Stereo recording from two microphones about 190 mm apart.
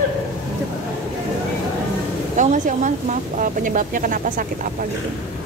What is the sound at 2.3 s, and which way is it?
A woman's voice, 40° right (ahead or behind).